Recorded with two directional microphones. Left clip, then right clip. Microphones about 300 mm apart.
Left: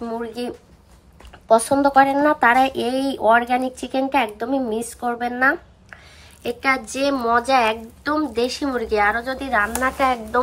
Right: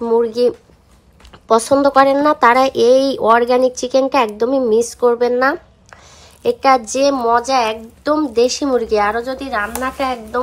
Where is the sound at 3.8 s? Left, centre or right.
Centre.